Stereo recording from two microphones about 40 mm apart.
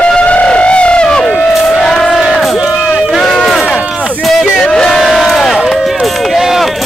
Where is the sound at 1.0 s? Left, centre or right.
Centre.